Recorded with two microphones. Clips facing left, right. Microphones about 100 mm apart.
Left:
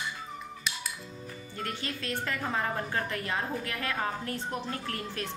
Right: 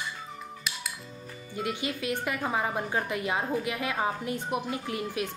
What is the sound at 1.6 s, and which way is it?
A woman's voice, 15° right (ahead or behind).